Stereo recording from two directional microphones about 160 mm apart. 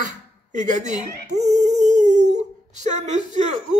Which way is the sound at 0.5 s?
50° right (ahead or behind).